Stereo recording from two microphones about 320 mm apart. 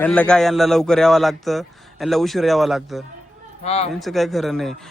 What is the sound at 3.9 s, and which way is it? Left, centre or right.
Speech, centre.